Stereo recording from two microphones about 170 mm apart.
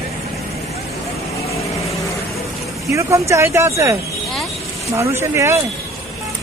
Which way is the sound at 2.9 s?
15° right (ahead or behind).